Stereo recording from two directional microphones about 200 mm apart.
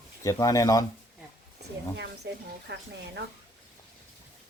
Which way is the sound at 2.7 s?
60° right (ahead or behind).